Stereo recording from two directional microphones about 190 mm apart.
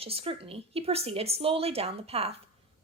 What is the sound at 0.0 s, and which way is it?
Speech, 30° right (ahead or behind).